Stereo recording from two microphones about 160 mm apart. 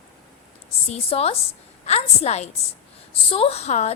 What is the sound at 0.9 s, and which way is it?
A woman's voice, 40° left (ahead or behind).